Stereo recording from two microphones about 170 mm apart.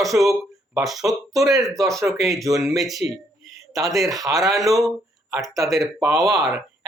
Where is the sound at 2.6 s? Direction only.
Centre (ahead or behind).